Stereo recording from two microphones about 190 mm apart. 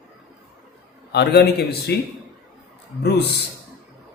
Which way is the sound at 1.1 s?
60° left (ahead or behind).